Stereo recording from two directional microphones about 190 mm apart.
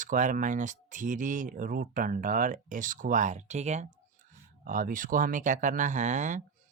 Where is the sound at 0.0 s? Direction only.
45° right (ahead or behind).